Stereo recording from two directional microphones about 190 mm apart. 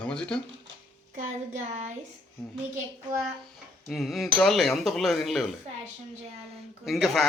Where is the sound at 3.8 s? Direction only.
Centre (ahead or behind).